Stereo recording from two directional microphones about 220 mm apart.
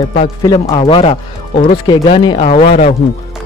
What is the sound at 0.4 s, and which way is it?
Speech, 20° left (ahead or behind).